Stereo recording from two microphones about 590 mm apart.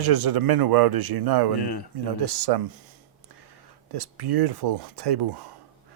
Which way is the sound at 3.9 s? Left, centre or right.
Right.